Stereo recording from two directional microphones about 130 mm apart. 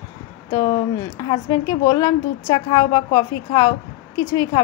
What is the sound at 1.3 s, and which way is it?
A woman's voice, 25° left (ahead or behind).